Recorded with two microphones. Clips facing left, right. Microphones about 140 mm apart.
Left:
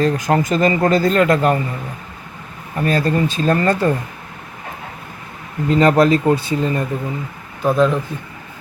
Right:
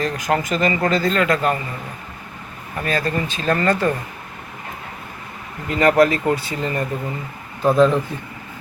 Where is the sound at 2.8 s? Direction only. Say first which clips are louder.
Left 5 dB; 35° left (ahead or behind).